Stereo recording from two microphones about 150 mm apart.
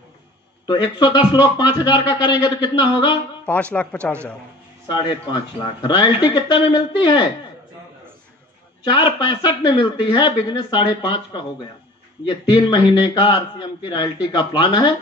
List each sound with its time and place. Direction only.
0.7 s speech: 30° left (ahead or behind)
3.7 s speech: 10° left (ahead or behind)
4.9 s speech: 30° left (ahead or behind)
8.9 s speech: 30° left (ahead or behind)
12.4 s speech: 30° left (ahead or behind)